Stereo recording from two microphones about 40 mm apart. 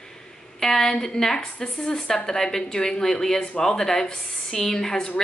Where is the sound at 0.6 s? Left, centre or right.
Centre.